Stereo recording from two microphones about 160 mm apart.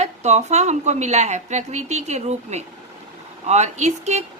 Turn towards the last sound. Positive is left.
turn(degrees=-45)  # may be behind; listen again after turning